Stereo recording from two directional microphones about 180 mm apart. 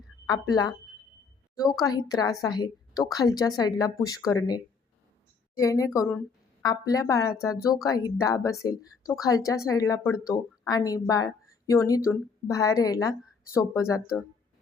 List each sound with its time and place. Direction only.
0.3 s a woman's voice: 20° left (ahead or behind)